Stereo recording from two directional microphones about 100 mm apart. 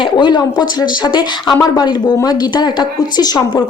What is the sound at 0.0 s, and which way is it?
A woman's voice, 50° left (ahead or behind).